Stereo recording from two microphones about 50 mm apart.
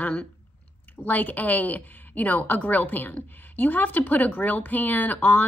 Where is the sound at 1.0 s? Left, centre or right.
Left.